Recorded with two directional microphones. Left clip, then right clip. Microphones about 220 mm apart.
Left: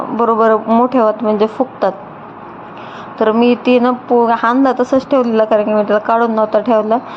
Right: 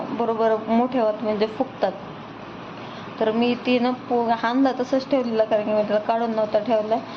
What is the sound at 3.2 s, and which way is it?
A woman's voice, 20° left (ahead or behind).